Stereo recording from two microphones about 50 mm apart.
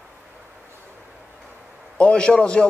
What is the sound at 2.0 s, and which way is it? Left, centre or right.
Speech, left.